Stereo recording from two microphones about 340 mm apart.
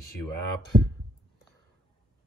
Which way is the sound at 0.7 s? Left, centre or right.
Right.